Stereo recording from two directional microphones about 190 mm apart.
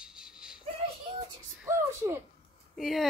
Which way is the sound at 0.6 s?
30° right (ahead or behind).